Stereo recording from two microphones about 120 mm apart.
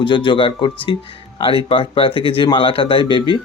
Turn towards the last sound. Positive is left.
turn(degrees=40)  # may be behind; listen again after turning